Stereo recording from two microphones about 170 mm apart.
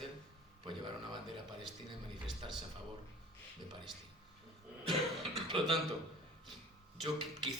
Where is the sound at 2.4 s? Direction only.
30° right (ahead or behind).